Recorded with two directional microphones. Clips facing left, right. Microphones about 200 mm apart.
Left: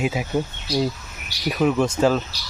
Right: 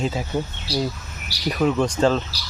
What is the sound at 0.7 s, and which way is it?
Speech, 30° right (ahead or behind).